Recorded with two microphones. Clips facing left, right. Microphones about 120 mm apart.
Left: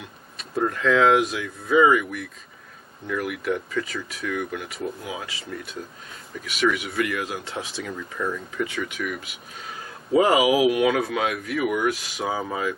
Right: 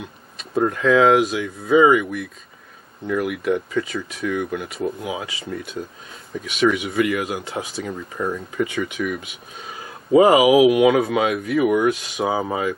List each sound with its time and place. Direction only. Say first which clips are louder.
0.7 s speech: right 3 dB; 10° right (ahead or behind)
3.1 s speech: right 5 dB; 20° right (ahead or behind)
4.7 s speech: right 7 dB; 10° right (ahead or behind)
6.4 s speech: right 4 dB; 20° right (ahead or behind)
7.1 s speech: right 5 dB; 5° right (ahead or behind)
7.8 s speech: right 2 dB; 25° right (ahead or behind)
10.1 s speech: right 6 dB; 5° right (ahead or behind)